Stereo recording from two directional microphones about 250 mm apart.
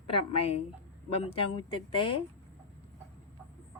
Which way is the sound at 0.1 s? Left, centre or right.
Left.